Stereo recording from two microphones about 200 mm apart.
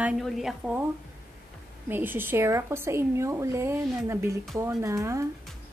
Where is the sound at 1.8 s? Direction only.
10° right (ahead or behind).